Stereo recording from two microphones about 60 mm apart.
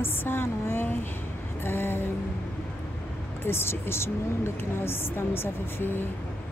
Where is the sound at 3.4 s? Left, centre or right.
Left.